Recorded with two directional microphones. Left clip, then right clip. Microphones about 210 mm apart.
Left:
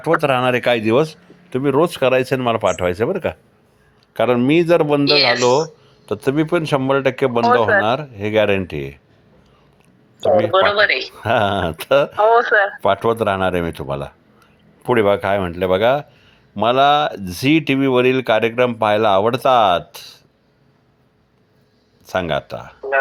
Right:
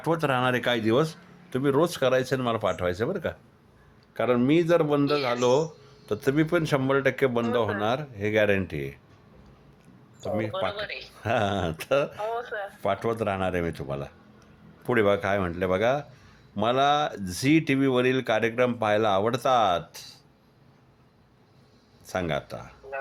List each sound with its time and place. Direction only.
0.0 s speech: 20° left (ahead or behind)
5.4 s speech: 15° left (ahead or behind)
10.2 s speech: 30° left (ahead or behind)
10.5 s speech: 45° left (ahead or behind)
11.2 s speech: 25° left (ahead or behind)
12.3 s speech: 40° left (ahead or behind)
12.8 s speech: 25° left (ahead or behind)
22.0 s speech: 20° left (ahead or behind)